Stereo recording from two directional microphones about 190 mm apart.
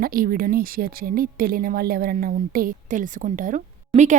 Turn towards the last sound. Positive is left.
turn(degrees=-40)  # may be behind; listen again after turning